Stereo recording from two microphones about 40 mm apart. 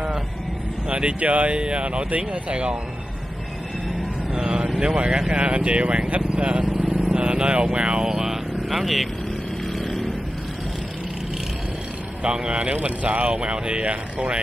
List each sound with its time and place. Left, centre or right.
0.8 s speech: right
4.3 s speech: right; by 9.1 s centre
9.7 s vehicle: centre
12.2 s speech: right